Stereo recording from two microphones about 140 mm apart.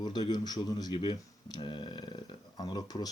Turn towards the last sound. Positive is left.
turn(degrees=25)  # may be behind; listen again after turning